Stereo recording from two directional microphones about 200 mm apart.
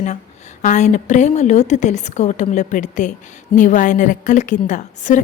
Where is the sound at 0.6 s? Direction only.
35° left (ahead or behind).